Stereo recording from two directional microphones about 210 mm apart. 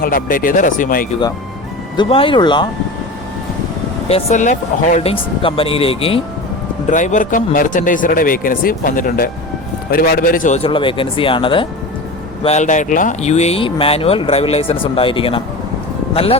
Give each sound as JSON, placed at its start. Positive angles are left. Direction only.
{"t": 0.0, "sound": "speech", "side_deg": 40}
{"t": 2.0, "sound": "speech", "side_deg": 25}
{"t": 4.1, "sound": "speech", "side_deg": 35}
{"t": 5.1, "sound": "speech", "side_deg": 25}
{"t": 6.9, "sound": "speech", "side_deg": 35}